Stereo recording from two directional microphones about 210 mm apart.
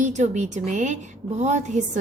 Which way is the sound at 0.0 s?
35° right (ahead or behind).